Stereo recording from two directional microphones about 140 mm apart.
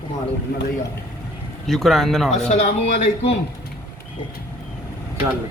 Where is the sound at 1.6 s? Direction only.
Centre (ahead or behind).